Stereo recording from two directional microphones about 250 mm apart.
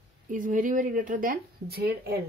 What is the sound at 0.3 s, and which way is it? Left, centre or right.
Speech, right.